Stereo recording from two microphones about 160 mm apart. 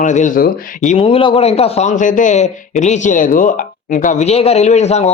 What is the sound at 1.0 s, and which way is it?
A man's voice, 35° left (ahead or behind).